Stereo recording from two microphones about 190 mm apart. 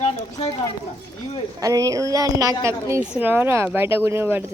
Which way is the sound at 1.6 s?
20° right (ahead or behind).